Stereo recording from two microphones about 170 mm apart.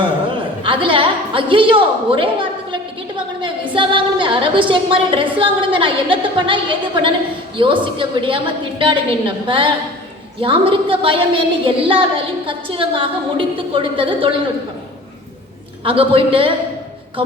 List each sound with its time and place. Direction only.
0.6 s a woman's voice: 30° right (ahead or behind)
15.8 s a woman's voice: 30° right (ahead or behind)